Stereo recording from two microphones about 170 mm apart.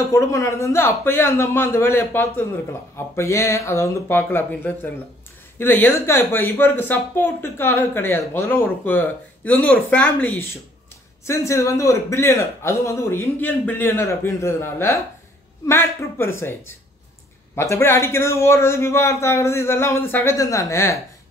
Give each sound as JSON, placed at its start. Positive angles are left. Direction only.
{"t": 0.1, "sound": "speech", "side_deg": 20}